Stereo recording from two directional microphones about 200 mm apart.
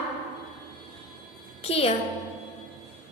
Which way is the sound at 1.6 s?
30° left (ahead or behind).